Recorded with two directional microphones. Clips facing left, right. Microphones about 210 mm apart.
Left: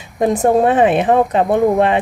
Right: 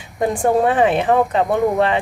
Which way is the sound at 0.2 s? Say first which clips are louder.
Left 3 dB; 20° left (ahead or behind).